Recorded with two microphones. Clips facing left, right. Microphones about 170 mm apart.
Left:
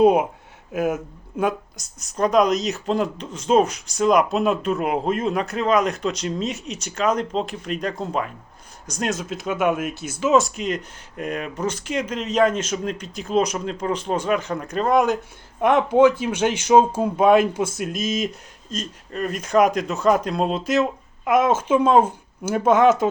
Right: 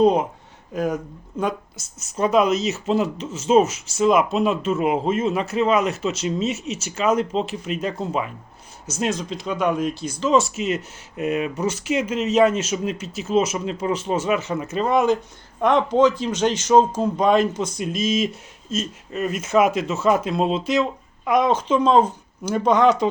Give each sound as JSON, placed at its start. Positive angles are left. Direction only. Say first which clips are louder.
{"t": 0.0, "sound": "speech", "louder": "left 1 dB", "side_deg": 10}